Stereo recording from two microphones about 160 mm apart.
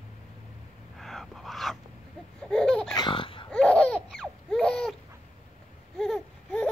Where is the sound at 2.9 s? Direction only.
30° left (ahead or behind).